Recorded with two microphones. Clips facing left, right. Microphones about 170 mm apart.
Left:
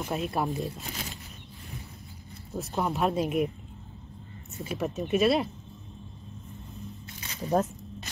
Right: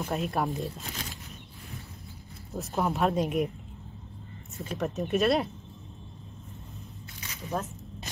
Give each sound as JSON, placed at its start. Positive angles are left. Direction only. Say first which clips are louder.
{"t": 0.0, "sound": "speech", "louder": "even", "side_deg": 0}
{"t": 2.5, "sound": "speech", "louder": "even", "side_deg": 0}
{"t": 4.6, "sound": "speech", "louder": "left 1 dB", "side_deg": 5}
{"t": 7.2, "sound": "squish", "louder": "left 7 dB", "side_deg": 35}